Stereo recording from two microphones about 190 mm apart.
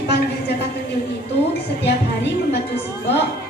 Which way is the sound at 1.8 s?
60° left (ahead or behind).